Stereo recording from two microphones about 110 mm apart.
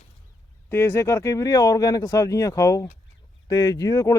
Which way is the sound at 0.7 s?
20° left (ahead or behind).